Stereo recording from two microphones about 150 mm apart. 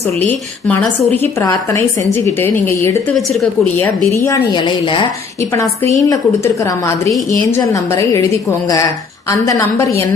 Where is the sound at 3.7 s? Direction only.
15° left (ahead or behind); by 5.0 s 35° left (ahead or behind).